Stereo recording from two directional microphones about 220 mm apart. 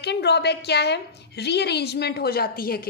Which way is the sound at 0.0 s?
50° left (ahead or behind).